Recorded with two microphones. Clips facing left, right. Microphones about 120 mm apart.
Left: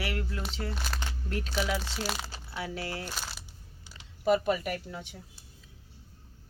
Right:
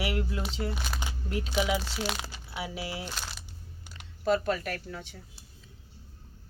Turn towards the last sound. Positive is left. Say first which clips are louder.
# left 1 dB
turn(degrees=15)  # may be behind; listen again after turning